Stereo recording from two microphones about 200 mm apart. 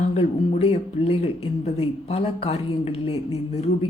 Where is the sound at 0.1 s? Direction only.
35° left (ahead or behind).